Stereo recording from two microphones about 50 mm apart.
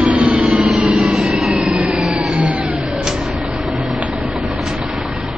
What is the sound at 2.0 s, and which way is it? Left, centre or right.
Vehicle, centre.